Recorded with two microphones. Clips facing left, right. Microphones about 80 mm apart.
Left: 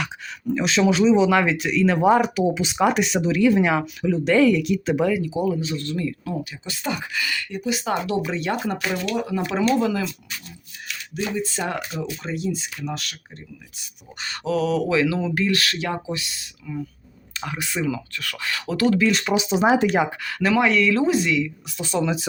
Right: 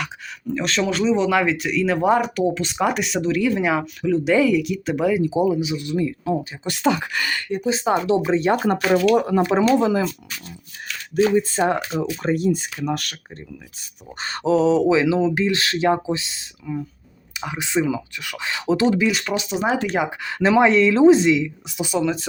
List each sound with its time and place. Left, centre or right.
0.0 s speech: centre
5.1 s speech: right
6.7 s speech: right
7.1 s speech: right
8.5 s speech: right
9.7 s speech: right
11.1 s speech: right
14.2 s speech: right
19.2 s speech: centre
20.1 s speech: right
21.9 s speech: centre